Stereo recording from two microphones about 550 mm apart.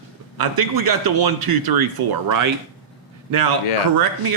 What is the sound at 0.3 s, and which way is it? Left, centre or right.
A man's voice, right.